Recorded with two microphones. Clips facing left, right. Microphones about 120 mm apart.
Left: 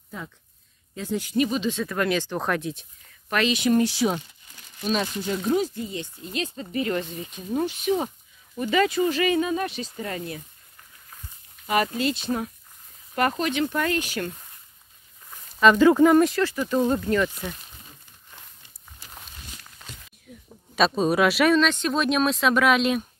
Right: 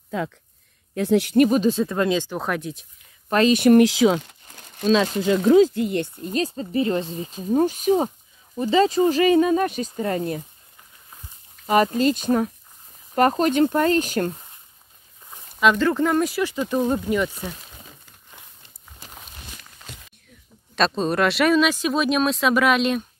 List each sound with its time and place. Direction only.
0.1 s speech: 90° right
0.9 s speech: 70° right (ahead or behind); by 1.9 s 40° right (ahead or behind)
1.9 s speech: 25° right (ahead or behind); by 2.9 s centre (ahead or behind)
3.3 s speech: 35° right (ahead or behind)
3.5 s speech: 60° right (ahead or behind); by 4.4 s 80° right
4.5 s crumpling: 55° right (ahead or behind); by 5.1 s 75° right (ahead or behind)
5.3 s speech: 85° right; by 6.3 s 60° right (ahead or behind)
6.3 s speech: 35° right (ahead or behind)
9.9 s speech: 35° right (ahead or behind)
11.6 s speech: 35° right (ahead or behind)
15.8 s speech: 10° left (ahead or behind)
16.3 s speech: 15° right (ahead or behind)
20.3 s a sound: 10° left (ahead or behind)
20.7 s speech: 5° left (ahead or behind)